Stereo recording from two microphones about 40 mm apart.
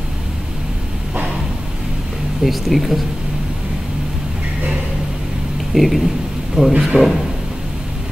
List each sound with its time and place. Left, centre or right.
2.4 s speech: centre
5.8 s speech: centre
6.9 s speech: right